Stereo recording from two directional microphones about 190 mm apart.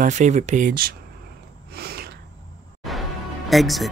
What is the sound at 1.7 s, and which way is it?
Gasp, 55° right (ahead or behind).